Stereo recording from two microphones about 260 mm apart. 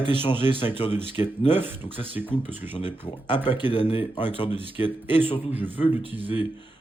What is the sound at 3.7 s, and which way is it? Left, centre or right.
Speech, left.